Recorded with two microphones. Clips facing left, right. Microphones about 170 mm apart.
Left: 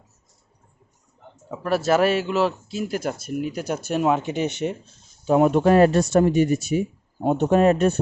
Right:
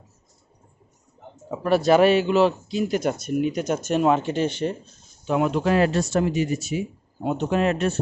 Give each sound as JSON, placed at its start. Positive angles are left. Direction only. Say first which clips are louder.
{"t": 1.6, "sound": "speech", "louder": "right 3 dB", "side_deg": 0}
{"t": 5.2, "sound": "speech", "louder": "left 5 dB", "side_deg": 35}
{"t": 5.5, "sound": "speech", "louder": "left 5 dB", "side_deg": 50}